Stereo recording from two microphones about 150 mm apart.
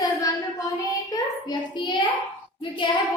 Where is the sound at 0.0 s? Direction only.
25° left (ahead or behind).